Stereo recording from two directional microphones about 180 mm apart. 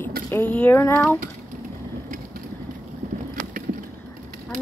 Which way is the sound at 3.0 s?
50° right (ahead or behind).